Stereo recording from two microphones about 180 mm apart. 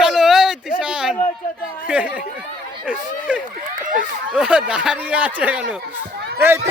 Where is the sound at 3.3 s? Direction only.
5° right (ahead or behind).